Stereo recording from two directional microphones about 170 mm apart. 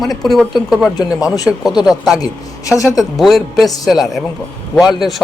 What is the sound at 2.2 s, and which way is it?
Speech, 20° left (ahead or behind).